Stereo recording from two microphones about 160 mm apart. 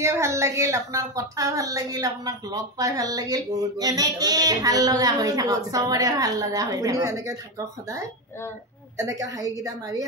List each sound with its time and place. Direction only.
0.0 s a woman's voice: 15° right (ahead or behind)